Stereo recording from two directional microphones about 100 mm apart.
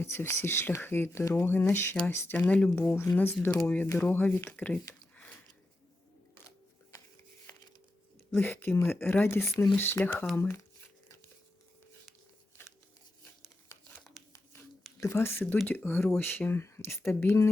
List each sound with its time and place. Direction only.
0.0 s speech: 25° left (ahead or behind)
2.5 s speech: 10° left (ahead or behind)
2.8 s speech: 25° left (ahead or behind)
5.1 s a sound: 15° left (ahead or behind)
8.3 s speech: 20° left (ahead or behind)
14.2 s a sound: centre (ahead or behind)
15.0 s speech: 25° left (ahead or behind)